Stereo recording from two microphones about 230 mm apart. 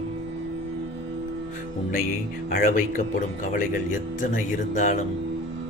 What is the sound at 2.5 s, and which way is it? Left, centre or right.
Speech, left.